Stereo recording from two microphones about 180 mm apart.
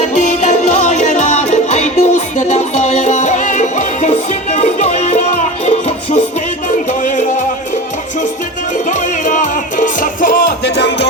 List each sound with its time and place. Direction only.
0.2 s music: 40° left (ahead or behind)
8.9 s music: 45° left (ahead or behind)